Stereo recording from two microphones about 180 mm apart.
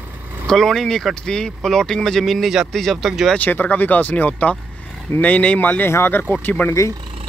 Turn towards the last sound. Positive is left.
turn(degrees=10)  # may be behind; listen again after turning